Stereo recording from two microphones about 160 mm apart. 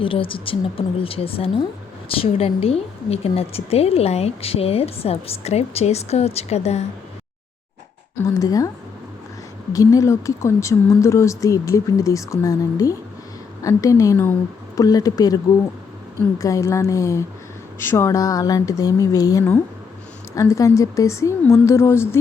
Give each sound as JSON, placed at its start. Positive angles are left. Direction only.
{"t": 0.0, "sound": "a woman's voice", "side_deg": 35}
{"t": 8.3, "sound": "speech", "side_deg": 20}
{"t": 9.7, "sound": "speech", "side_deg": 20}
{"t": 16.4, "sound": "speech", "side_deg": 20}